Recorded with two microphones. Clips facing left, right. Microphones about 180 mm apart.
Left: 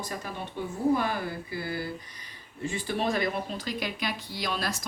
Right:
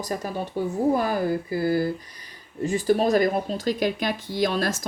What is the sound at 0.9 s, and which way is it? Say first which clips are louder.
Speech: right 7 dB; 45° right (ahead or behind).